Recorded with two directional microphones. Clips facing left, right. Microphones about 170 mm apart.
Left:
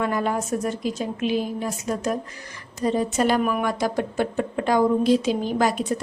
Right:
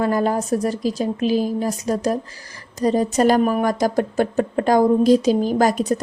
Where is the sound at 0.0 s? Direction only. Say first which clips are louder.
Right 5 dB; 35° right (ahead or behind).